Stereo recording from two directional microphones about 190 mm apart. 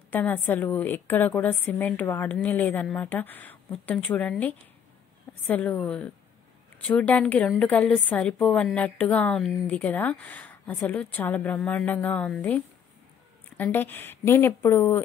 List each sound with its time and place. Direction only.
0.1 s a woman's voice: 10° left (ahead or behind)